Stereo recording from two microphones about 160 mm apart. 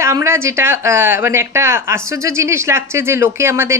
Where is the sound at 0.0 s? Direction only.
15° right (ahead or behind).